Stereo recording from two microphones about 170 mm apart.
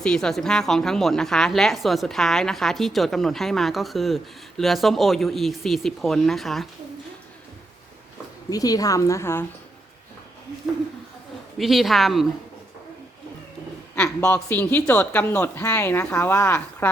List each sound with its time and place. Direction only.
0.0 s a woman's voice: 5° left (ahead or behind)
8.4 s a woman's voice: 20° left (ahead or behind)
11.5 s a woman's voice: centre (ahead or behind)
13.9 s a man's voice: 5° left (ahead or behind)